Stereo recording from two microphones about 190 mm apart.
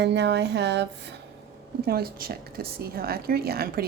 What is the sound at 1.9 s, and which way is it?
A woman's voice, 55° right (ahead or behind).